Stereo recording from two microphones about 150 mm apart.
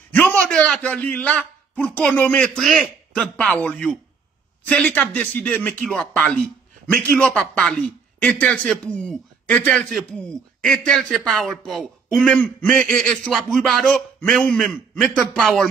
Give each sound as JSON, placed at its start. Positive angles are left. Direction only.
{"t": 0.1, "sound": "a man's voice", "side_deg": 10}